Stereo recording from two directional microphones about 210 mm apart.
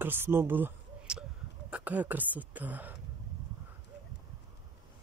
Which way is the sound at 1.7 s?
5° right (ahead or behind).